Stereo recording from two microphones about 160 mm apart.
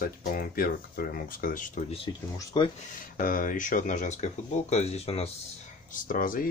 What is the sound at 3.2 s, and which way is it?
Speech, 60° left (ahead or behind).